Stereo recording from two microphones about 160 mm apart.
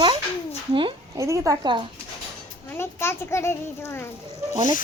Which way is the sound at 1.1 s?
20° right (ahead or behind).